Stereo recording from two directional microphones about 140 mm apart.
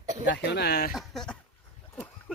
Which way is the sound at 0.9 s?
Centre (ahead or behind).